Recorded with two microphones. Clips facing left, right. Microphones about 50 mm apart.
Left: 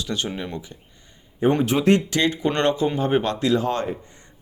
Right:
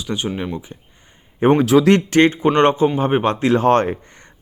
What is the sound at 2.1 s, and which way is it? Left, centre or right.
Speech, right.